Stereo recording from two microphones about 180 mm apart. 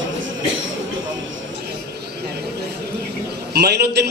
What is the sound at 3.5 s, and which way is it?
Speech, 65° right (ahead or behind).